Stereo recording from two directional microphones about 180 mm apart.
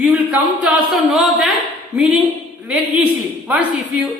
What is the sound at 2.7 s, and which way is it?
Speech, 5° right (ahead or behind).